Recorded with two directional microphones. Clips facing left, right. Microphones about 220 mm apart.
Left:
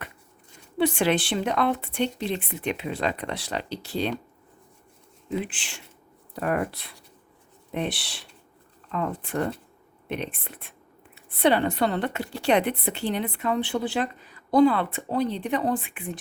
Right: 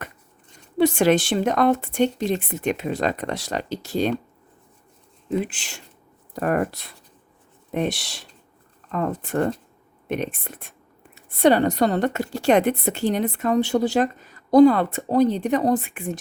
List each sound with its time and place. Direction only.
0.8 s a woman's voice: 45° right (ahead or behind)
5.3 s a woman's voice: 45° right (ahead or behind)